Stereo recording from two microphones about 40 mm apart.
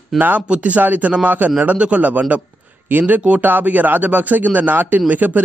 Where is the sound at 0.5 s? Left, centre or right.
Right.